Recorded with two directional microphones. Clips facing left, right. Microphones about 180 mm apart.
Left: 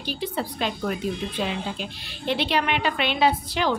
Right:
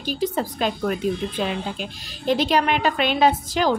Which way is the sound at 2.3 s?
40° right (ahead or behind).